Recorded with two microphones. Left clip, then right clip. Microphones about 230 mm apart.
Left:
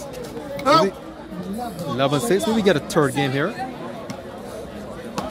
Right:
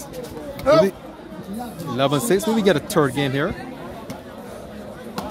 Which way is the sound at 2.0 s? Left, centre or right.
Centre.